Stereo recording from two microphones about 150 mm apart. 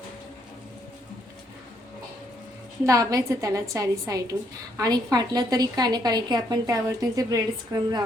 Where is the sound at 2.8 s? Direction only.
25° right (ahead or behind).